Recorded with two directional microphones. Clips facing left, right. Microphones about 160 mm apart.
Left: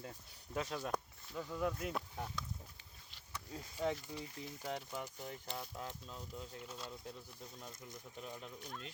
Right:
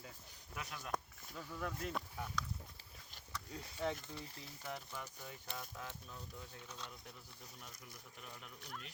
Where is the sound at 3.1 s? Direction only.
45° right (ahead or behind).